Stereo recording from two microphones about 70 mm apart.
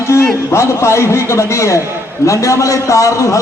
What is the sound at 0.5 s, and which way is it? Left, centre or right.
A man's voice, left.